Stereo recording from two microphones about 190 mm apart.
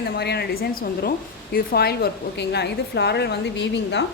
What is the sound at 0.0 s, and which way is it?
A woman's voice, 55° left (ahead or behind).